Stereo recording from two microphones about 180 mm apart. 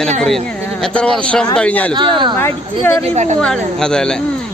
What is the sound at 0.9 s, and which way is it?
Speech, 5° left (ahead or behind).